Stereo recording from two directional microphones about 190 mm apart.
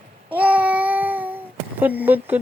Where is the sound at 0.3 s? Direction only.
10° right (ahead or behind).